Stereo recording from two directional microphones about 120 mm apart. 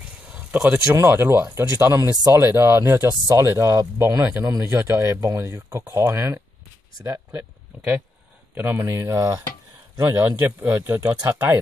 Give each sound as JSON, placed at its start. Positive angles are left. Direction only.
{"t": 0.3, "sound": "a sound", "side_deg": -10}
{"t": 0.9, "sound": "speech", "side_deg": -20}
{"t": 10.0, "sound": "speech", "side_deg": -15}